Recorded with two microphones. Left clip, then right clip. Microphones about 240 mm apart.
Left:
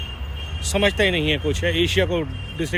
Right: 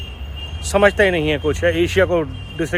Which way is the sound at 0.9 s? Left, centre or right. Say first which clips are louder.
Right 4 dB; right.